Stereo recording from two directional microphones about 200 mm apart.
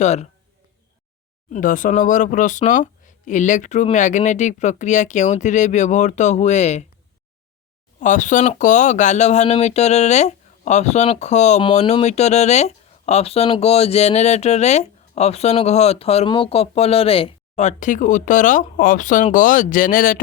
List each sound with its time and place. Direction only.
0.0 s speech: 35° left (ahead or behind)
1.5 s speech: 40° left (ahead or behind)
7.9 s speech: 40° left (ahead or behind)